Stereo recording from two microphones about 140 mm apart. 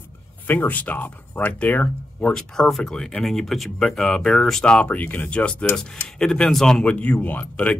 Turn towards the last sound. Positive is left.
turn(degrees=10)  # may be behind; listen again after turning